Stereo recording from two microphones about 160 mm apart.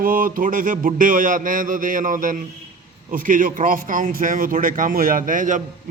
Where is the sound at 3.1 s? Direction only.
60° right (ahead or behind).